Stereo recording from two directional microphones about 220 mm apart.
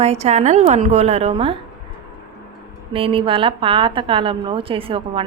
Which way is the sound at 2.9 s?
25° right (ahead or behind).